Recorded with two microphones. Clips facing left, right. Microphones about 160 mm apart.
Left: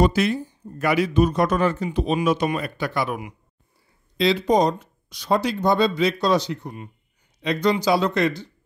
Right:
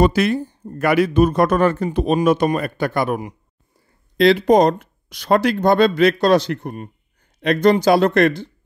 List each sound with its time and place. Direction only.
0.0 s a man's voice: 60° right (ahead or behind)
4.2 s speech: 60° right (ahead or behind)